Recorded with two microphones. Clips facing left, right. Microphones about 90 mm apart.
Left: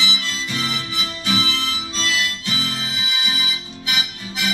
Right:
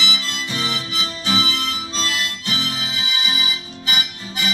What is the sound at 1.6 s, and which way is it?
Harmonica, 50° right (ahead or behind).